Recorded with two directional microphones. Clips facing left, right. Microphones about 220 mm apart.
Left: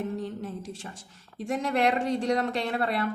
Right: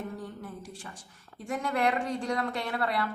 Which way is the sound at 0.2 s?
25° left (ahead or behind).